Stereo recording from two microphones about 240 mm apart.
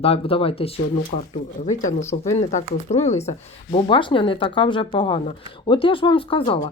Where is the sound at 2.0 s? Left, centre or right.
Centre.